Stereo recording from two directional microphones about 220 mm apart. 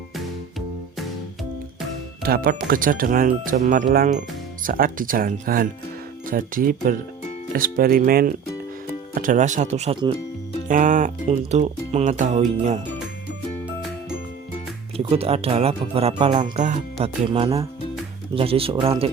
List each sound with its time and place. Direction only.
2.2 s speech: 40° right (ahead or behind); by 10.2 s 25° right (ahead or behind)
10.7 s speech: 35° right (ahead or behind)
14.9 s speech: 25° right (ahead or behind)